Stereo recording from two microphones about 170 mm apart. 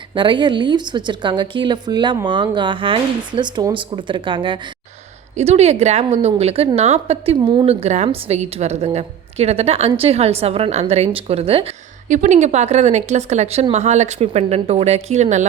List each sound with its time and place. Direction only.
0.1 s a woman's voice: 30° right (ahead or behind)